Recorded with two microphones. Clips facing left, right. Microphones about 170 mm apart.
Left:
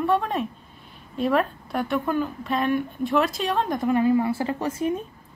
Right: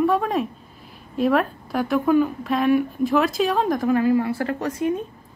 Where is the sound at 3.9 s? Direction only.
25° left (ahead or behind).